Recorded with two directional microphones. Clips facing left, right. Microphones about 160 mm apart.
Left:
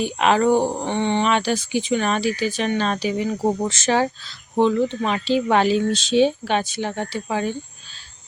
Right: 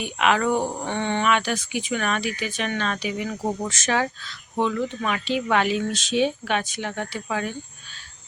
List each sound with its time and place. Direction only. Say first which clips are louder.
0.0 s speech: left 4 dB; 30° left (ahead or behind)
1.3 s speech: left 3 dB; 30° left (ahead or behind)